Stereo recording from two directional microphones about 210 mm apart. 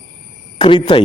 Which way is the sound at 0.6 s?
25° left (ahead or behind).